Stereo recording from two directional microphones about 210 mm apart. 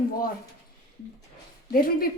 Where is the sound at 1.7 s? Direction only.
45° left (ahead or behind).